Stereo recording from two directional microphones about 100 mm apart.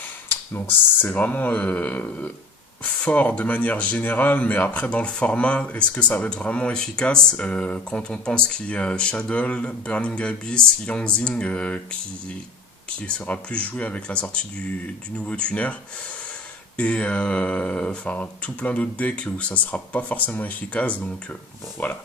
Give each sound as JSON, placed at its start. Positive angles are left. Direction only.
{"t": 1.1, "sound": "speech", "side_deg": 15}
{"t": 16.7, "sound": "speech", "side_deg": 10}